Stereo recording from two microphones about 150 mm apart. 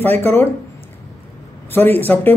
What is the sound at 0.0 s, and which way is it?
Speech, 15° left (ahead or behind).